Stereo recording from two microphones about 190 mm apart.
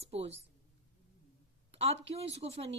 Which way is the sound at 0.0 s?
35° right (ahead or behind).